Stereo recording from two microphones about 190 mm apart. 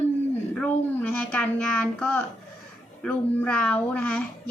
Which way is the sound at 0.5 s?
5° left (ahead or behind).